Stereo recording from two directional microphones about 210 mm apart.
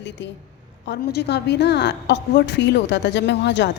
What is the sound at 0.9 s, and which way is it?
A woman's voice, 55° left (ahead or behind).